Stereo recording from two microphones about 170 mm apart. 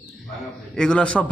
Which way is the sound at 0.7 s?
5° left (ahead or behind).